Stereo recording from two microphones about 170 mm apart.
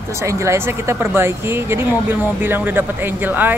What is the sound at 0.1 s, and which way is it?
Speech, 15° right (ahead or behind).